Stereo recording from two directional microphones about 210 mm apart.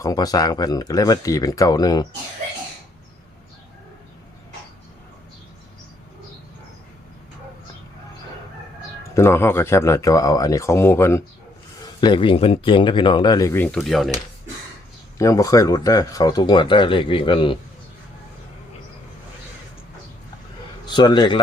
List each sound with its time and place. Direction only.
0.0 s speech: 15° left (ahead or behind)
9.1 s speech: 10° left (ahead or behind)
15.2 s speech: 15° left (ahead or behind)
20.8 s speech: 20° left (ahead or behind)